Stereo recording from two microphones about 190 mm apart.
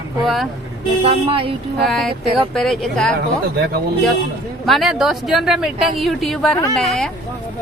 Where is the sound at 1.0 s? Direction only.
30° right (ahead or behind).